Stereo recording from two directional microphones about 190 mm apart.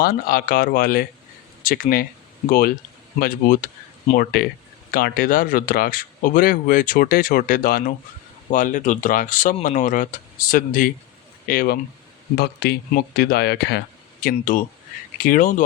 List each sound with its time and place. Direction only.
0.0 s speech: 50° left (ahead or behind)